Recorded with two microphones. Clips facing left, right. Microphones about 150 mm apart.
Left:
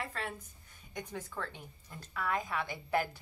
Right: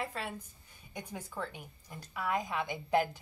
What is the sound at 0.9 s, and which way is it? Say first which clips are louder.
A woman's voice: even; 10° right (ahead or behind).